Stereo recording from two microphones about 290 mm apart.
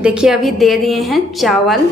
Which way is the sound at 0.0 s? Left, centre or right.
Centre.